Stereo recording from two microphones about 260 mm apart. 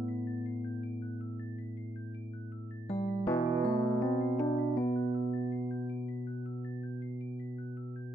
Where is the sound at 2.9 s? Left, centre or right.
Centre.